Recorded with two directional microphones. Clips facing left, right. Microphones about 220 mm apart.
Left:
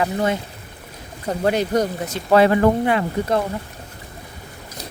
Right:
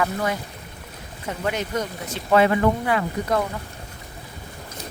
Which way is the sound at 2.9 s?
25° left (ahead or behind).